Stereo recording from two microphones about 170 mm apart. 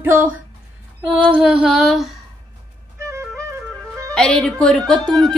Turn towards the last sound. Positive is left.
turn(degrees=0)  # may be behind; listen again after turning